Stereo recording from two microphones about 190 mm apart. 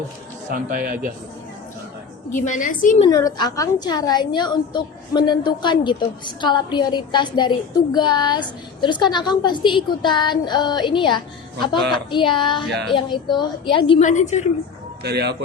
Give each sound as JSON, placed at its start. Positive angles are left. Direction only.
{"t": 0.5, "sound": "a man's voice", "side_deg": -50}
{"t": 2.4, "sound": "a woman's voice", "side_deg": 40}
{"t": 3.1, "sound": "a woman's voice", "side_deg": 20}
{"t": 14.0, "sound": "a woman's voice", "side_deg": 40}
{"t": 15.0, "sound": "speech", "side_deg": -60}